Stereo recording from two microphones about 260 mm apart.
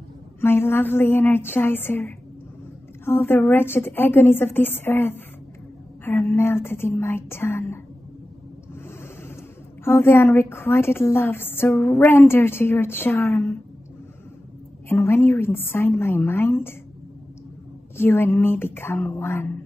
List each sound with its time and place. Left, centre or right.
0.4 s a woman's voice: centre
9.8 s a woman's voice: centre
14.9 s a woman's voice: centre
17.9 s a woman's voice: centre